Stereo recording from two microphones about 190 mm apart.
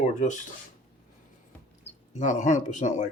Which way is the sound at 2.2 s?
40° left (ahead or behind).